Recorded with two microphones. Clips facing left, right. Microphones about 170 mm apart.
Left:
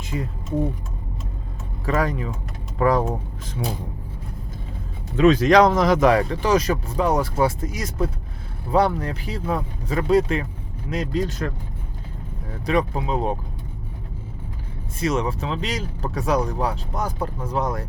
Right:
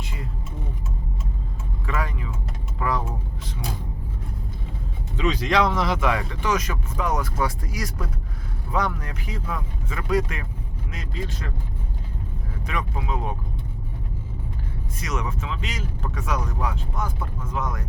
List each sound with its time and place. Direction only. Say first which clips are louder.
1.9 s speech: left 7 dB; 40° left (ahead or behind)
5.1 s speech: left 8 dB; 50° left (ahead or behind)
12.6 s speech: left 8 dB; 35° left (ahead or behind)
15.0 s speech: left 8 dB; 30° left (ahead or behind)